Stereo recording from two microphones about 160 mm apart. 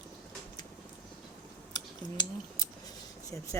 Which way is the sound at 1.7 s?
25° left (ahead or behind).